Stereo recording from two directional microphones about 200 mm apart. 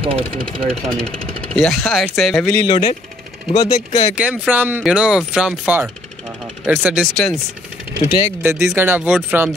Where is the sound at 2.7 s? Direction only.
30° left (ahead or behind).